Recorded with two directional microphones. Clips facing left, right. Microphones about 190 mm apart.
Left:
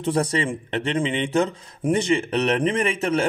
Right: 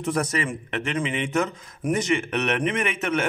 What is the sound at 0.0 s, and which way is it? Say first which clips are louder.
A man's voice: left 3 dB; 30° left (ahead or behind).